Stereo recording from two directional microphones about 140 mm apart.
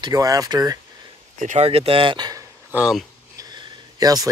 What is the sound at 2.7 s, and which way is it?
Speech, 5° right (ahead or behind).